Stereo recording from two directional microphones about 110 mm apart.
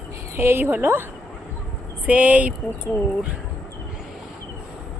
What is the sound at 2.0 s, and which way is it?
Speech, 15° right (ahead or behind).